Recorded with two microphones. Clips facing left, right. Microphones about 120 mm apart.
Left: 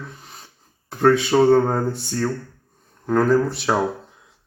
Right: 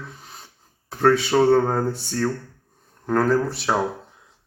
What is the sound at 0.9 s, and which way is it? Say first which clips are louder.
Speech: left 2 dB; 5° right (ahead or behind).